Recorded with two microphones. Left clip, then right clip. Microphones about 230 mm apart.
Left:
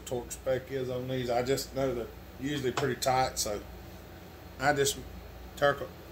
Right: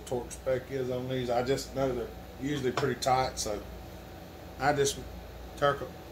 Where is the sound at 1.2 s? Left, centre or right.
Left.